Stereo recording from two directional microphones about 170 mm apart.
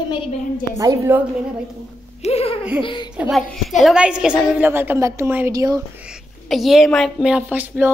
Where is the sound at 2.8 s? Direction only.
30° left (ahead or behind).